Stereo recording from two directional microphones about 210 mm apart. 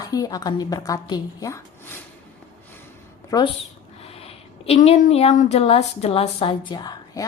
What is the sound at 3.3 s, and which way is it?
A woman's voice, 20° left (ahead or behind).